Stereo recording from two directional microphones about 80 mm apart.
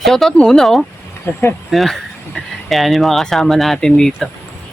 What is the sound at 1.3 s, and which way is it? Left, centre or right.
Speech, left.